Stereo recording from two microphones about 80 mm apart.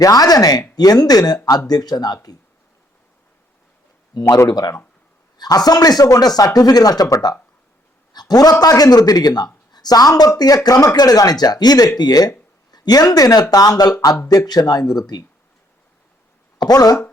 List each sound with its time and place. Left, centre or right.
0.0 s speech: left
4.2 s speech: left
4.4 s a man's voice: left
16.6 s speech: left